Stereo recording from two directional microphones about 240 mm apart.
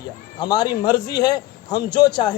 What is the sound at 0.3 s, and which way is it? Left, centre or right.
A woman's voice, centre.